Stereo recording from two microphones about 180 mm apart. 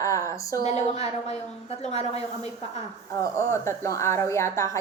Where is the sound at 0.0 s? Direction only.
20° left (ahead or behind).